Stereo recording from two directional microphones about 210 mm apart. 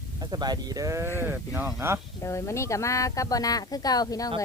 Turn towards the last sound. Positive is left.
turn(degrees=15)  # may be behind; listen again after turning